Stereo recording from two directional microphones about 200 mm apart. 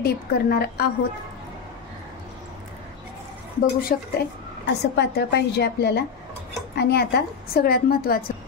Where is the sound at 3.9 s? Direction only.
45° left (ahead or behind).